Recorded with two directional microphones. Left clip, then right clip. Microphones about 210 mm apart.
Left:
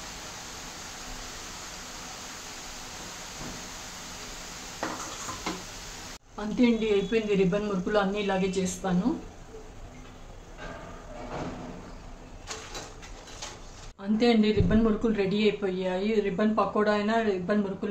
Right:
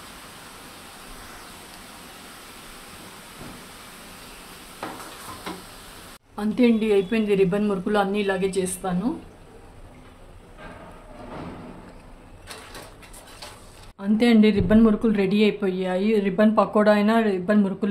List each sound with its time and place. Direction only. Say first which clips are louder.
6.3 s speech: right 5 dB; 35° right (ahead or behind)
14.1 s speech: right 4 dB; 40° right (ahead or behind)